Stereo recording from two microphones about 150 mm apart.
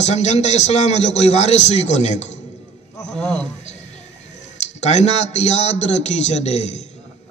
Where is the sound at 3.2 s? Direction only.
5° left (ahead or behind).